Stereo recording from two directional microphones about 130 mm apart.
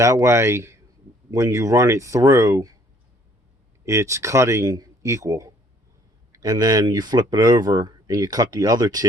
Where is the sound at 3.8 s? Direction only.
25° right (ahead or behind).